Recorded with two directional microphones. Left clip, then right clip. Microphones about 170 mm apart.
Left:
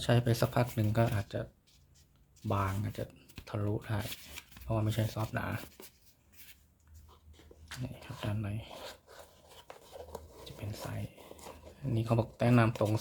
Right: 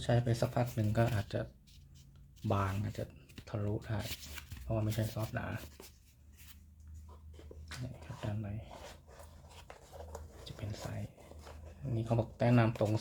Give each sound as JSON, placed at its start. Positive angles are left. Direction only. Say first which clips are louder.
{"t": 0.0, "sound": "speech", "louder": "left 3 dB", "side_deg": 30}
{"t": 0.9, "sound": "speech", "louder": "left 2 dB", "side_deg": 15}
{"t": 1.2, "sound": "speech", "louder": "even", "side_deg": 5}
{"t": 2.5, "sound": "speech", "louder": "left 1 dB", "side_deg": 10}
{"t": 7.7, "sound": "speech", "louder": "left 4 dB", "side_deg": 25}
{"t": 9.6, "sound": "a sound", "louder": "left 3 dB", "side_deg": 20}
{"t": 10.4, "sound": "whispering", "louder": "left 1 dB", "side_deg": 10}
{"t": 11.9, "sound": "speech", "louder": "left 3 dB", "side_deg": 25}